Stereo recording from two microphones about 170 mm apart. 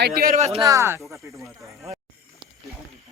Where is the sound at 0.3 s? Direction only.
40° right (ahead or behind).